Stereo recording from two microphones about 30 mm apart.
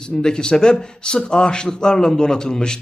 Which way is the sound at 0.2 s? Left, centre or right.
Left.